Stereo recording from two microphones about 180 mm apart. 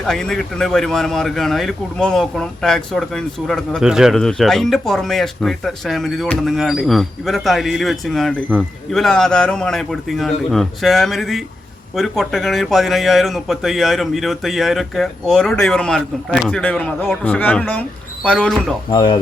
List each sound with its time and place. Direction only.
0.0 s a man's voice: centre (ahead or behind)
18.9 s speech: 25° left (ahead or behind)